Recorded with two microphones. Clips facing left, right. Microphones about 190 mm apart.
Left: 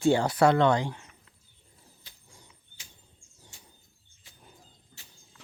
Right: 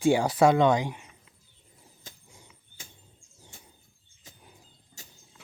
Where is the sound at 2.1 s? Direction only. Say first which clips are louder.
Right 7 dB; 45° right (ahead or behind).